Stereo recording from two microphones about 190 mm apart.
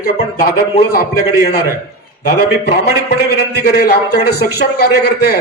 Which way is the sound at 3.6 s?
55° left (ahead or behind).